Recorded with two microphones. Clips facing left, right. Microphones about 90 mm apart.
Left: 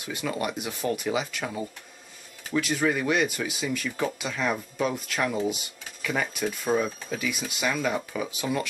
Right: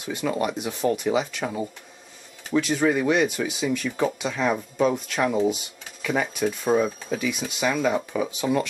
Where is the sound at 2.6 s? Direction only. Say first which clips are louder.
Right 4 dB; 5° right (ahead or behind).